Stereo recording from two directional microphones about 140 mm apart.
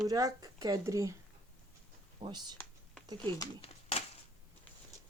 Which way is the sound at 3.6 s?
45° left (ahead or behind).